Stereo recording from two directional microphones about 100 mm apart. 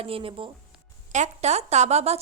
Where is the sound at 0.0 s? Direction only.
65° right (ahead or behind).